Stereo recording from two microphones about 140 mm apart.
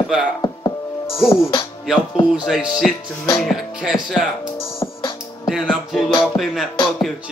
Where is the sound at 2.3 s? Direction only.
5° right (ahead or behind).